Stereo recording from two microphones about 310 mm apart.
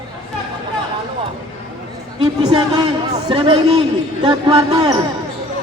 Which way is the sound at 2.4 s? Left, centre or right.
Centre.